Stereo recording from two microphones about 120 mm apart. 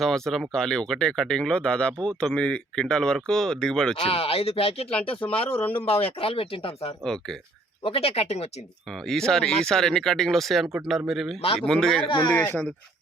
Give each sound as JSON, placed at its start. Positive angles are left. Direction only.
{"t": 0.0, "sound": "speech", "side_deg": 5}
{"t": 4.0, "sound": "speech", "side_deg": 55}
{"t": 7.0, "sound": "speech", "side_deg": 5}
{"t": 7.9, "sound": "speech", "side_deg": 50}
{"t": 8.9, "sound": "speech", "side_deg": 5}